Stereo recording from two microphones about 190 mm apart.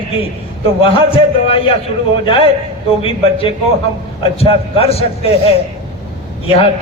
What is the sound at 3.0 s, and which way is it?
A man's voice, 30° left (ahead or behind).